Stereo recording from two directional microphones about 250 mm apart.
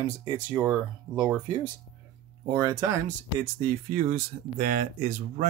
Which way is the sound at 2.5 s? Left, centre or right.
Centre.